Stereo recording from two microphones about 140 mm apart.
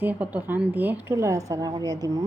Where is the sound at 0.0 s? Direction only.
10° right (ahead or behind).